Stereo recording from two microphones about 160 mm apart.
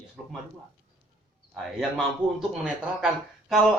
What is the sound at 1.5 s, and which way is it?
Speech, centre (ahead or behind).